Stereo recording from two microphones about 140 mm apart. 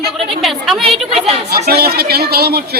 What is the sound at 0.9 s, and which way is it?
Speech, 45° right (ahead or behind).